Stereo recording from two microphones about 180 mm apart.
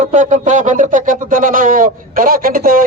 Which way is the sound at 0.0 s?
45° right (ahead or behind).